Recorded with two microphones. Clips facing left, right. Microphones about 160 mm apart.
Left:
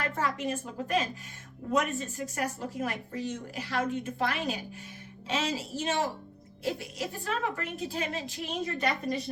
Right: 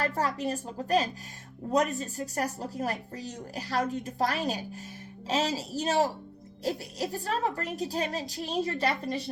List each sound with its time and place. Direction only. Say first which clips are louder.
0.0 s speech: right 2 dB; 35° right (ahead or behind)